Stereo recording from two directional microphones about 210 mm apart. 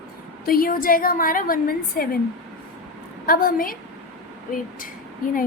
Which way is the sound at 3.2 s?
45° left (ahead or behind).